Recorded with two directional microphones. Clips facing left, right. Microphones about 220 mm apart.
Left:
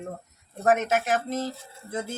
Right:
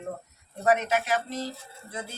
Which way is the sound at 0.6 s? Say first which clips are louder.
Left 2 dB; 45° left (ahead or behind).